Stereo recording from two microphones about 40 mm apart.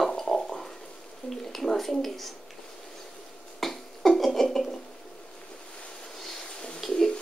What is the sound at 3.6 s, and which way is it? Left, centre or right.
Cough, centre.